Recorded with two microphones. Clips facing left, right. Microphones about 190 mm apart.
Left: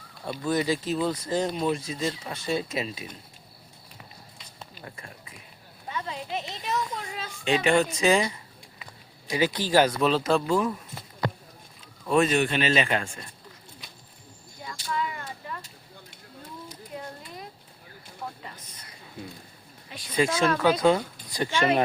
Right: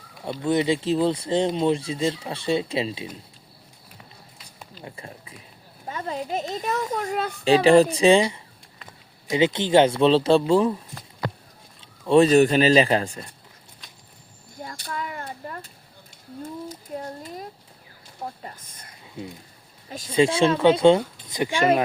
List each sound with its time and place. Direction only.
0.3 s speech: 25° right (ahead or behind)
5.9 s speech: 45° right (ahead or behind)
7.4 s fowl: 35° right (ahead or behind)
9.3 s speech: 25° right (ahead or behind)
11.8 s speech: 30° right (ahead or behind)
14.6 s a sound: 45° right (ahead or behind)
18.4 s a sound: 50° right (ahead or behind)
20.1 s speech: 30° right (ahead or behind)